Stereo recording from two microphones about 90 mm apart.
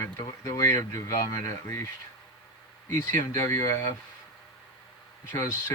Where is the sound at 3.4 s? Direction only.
35° left (ahead or behind).